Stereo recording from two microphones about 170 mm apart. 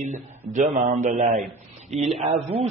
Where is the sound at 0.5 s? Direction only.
50° right (ahead or behind).